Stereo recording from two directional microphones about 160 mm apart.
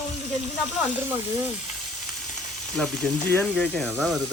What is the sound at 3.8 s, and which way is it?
Speech, 5° right (ahead or behind).